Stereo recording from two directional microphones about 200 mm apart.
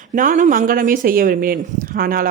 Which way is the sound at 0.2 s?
40° right (ahead or behind).